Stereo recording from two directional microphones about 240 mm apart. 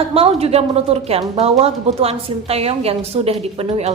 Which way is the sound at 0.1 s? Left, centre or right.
Right.